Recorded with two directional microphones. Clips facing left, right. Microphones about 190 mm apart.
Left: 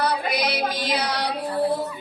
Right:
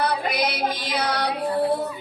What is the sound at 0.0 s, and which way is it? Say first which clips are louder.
Music: even; 55° right (ahead or behind).